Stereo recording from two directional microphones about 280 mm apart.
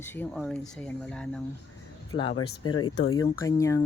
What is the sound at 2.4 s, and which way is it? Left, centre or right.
Speech, centre.